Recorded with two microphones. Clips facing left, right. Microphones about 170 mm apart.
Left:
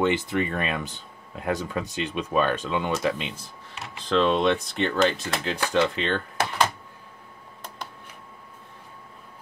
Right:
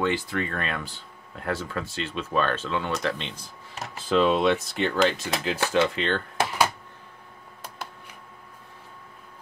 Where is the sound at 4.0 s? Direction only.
5° right (ahead or behind).